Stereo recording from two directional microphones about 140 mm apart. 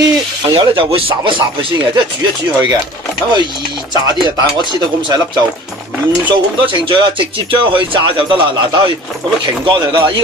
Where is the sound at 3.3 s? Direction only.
35° right (ahead or behind).